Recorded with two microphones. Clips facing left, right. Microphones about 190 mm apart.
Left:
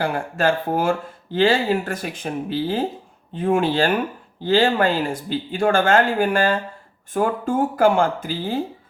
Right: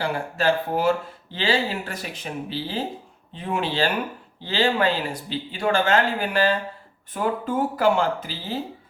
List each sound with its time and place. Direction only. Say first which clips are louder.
0.0 s speech: left 2 dB; 50° left (ahead or behind)